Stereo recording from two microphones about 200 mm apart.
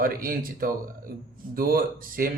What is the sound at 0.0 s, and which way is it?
Speech, 45° right (ahead or behind).